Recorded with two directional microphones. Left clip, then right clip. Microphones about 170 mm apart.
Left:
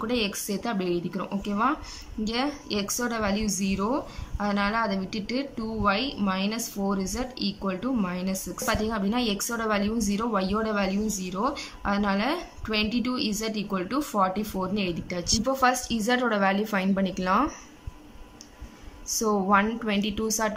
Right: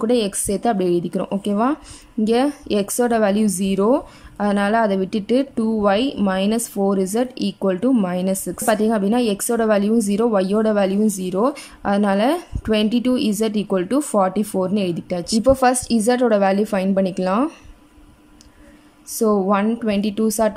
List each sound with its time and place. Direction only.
0.0 s a woman's voice: 35° right (ahead or behind)
19.1 s a woman's voice: 30° right (ahead or behind)